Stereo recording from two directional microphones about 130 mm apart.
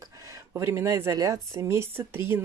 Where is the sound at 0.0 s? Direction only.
25° right (ahead or behind).